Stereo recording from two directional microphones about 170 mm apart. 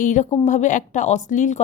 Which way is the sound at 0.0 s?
45° left (ahead or behind).